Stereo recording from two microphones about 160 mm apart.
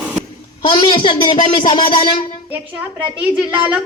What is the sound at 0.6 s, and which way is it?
A man's voice, 30° left (ahead or behind).